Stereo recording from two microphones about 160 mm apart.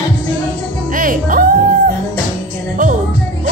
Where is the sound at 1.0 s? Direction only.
60° right (ahead or behind).